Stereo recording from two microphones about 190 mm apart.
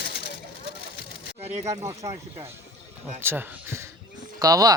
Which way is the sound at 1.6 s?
15° right (ahead or behind).